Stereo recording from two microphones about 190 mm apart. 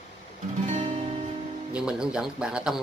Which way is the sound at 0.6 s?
40° right (ahead or behind).